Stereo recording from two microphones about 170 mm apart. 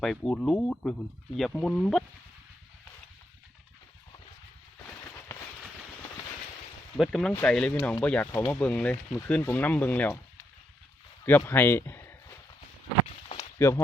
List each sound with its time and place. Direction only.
0.0 s speech: 5° left (ahead or behind)
7.0 s speech: 5° left (ahead or behind)
13.6 s speech: 15° left (ahead or behind)